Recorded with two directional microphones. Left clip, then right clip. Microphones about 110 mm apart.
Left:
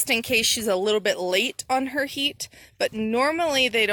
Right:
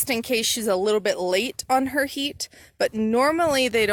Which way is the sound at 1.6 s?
35° right (ahead or behind).